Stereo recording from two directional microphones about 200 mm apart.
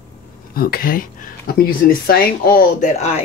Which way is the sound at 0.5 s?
45° left (ahead or behind).